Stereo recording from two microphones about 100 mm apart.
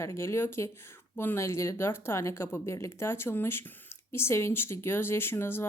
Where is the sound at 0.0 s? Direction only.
30° left (ahead or behind).